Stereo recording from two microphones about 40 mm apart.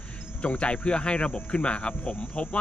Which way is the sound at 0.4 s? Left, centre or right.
Left.